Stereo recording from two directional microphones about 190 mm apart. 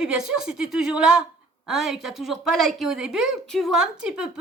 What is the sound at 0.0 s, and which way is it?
A woman's voice, 5° right (ahead or behind).